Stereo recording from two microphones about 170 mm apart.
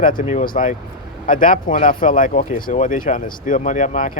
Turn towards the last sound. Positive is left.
turn(degrees=50)  # may be behind; listen again after turning